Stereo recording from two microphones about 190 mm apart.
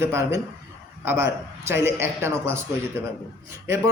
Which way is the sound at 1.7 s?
15° right (ahead or behind).